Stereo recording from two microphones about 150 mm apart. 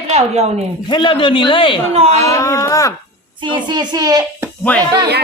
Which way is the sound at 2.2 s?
20° left (ahead or behind).